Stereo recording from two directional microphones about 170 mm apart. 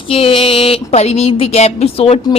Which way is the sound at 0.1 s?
30° left (ahead or behind).